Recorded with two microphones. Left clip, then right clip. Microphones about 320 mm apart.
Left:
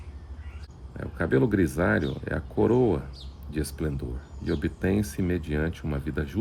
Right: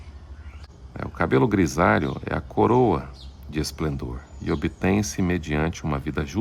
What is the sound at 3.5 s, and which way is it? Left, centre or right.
Speech, right.